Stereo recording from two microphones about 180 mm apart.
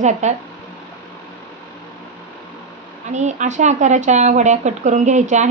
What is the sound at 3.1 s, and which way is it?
Speech, 40° right (ahead or behind).